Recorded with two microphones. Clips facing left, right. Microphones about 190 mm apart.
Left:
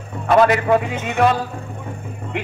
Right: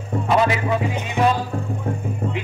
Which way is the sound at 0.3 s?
60° left (ahead or behind).